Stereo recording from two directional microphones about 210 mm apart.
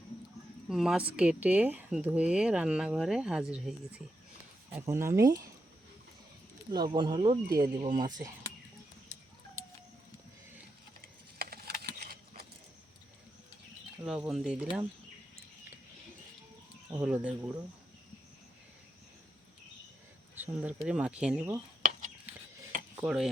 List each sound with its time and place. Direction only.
0.7 s a woman's voice: centre (ahead or behind)
6.7 s speech: 20° right (ahead or behind)
11.0 s a sound: 45° right (ahead or behind)
14.0 s a woman's voice: 5° right (ahead or behind)
17.0 s a woman's voice: 5° right (ahead or behind)
20.4 s a woman's voice: 10° right (ahead or behind)
23.0 s a woman's voice: 5° right (ahead or behind)